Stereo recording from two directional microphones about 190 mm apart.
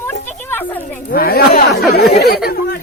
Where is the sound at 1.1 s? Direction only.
50° left (ahead or behind).